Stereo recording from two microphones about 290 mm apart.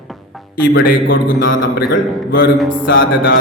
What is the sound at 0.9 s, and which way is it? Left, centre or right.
A man's voice, left.